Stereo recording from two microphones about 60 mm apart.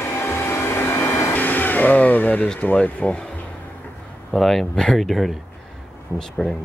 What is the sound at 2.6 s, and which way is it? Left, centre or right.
Speech, left.